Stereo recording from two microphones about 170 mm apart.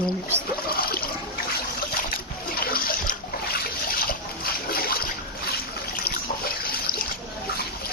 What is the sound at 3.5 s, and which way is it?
Splash, 60° left (ahead or behind).